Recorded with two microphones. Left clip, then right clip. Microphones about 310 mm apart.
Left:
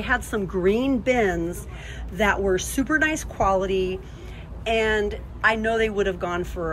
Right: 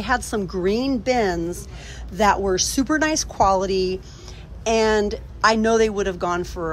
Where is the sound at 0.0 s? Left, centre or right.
Centre.